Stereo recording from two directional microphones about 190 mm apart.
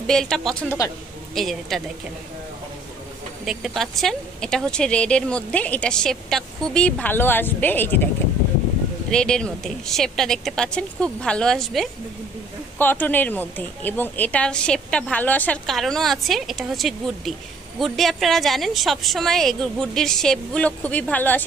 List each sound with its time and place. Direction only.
0.0 s speech: 5° left (ahead or behind)
3.4 s speech: centre (ahead or behind)
9.1 s a woman's voice: 5° left (ahead or behind)